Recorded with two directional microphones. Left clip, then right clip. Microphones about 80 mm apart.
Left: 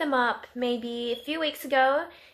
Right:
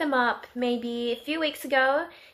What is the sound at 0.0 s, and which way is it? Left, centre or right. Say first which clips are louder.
Speech: right 1 dB; right.